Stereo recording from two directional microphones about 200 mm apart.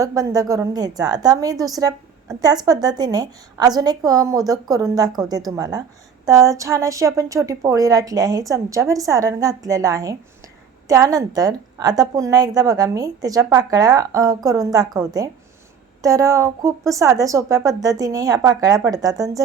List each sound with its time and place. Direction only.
0.0 s a woman's voice: 15° right (ahead or behind)